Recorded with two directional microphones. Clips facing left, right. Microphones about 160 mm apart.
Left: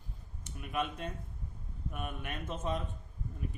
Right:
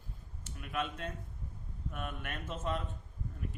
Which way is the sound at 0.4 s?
15° left (ahead or behind).